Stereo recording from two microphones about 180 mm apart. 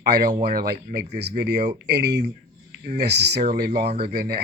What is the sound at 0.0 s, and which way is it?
Speech, 65° right (ahead or behind).